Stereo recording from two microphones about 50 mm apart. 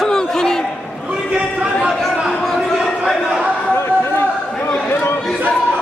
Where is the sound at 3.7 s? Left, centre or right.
Left.